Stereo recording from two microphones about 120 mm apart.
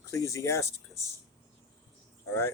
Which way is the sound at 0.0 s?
25° left (ahead or behind).